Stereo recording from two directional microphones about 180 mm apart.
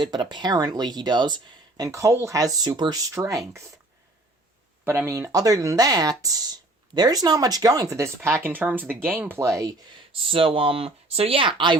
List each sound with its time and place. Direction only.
0.0 s speech: 25° right (ahead or behind)
4.9 s speech: 15° right (ahead or behind)
10.1 s speech: 30° right (ahead or behind)